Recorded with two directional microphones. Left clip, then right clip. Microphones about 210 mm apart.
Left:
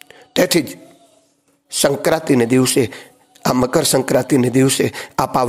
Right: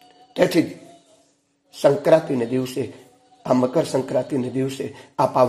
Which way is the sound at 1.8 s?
35° left (ahead or behind).